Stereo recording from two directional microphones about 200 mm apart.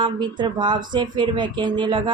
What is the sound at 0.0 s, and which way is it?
A woman's voice, 20° right (ahead or behind).